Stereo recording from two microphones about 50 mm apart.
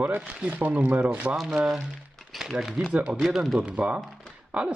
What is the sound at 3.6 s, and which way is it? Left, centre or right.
Speech, right.